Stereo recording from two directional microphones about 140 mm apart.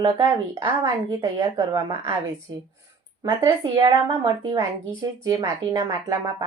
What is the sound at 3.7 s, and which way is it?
Speech, 25° right (ahead or behind).